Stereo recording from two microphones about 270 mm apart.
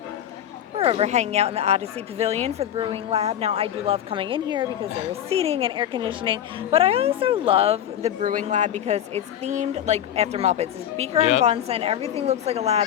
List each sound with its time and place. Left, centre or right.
0.8 s a woman's voice: right